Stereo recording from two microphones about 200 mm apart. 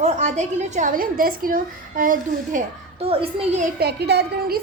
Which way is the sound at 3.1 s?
25° right (ahead or behind).